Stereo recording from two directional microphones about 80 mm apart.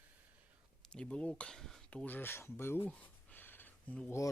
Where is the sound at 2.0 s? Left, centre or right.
Left.